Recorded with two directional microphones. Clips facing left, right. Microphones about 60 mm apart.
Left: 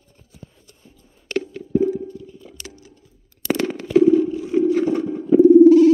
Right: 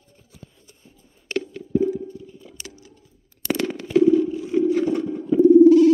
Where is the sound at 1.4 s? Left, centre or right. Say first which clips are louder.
Left 2 dB; left.